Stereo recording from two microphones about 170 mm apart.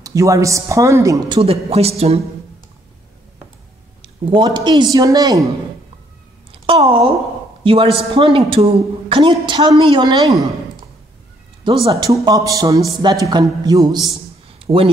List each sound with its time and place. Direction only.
0.0 s speech: 20° right (ahead or behind)
1.4 s a man's voice: 35° right (ahead or behind)
4.0 s speech: 25° right (ahead or behind)
6.5 s a man's voice: 35° right (ahead or behind)
11.6 s a man's voice: 30° right (ahead or behind)
12.1 s speech: 20° right (ahead or behind)
14.6 s a sound: 35° right (ahead or behind)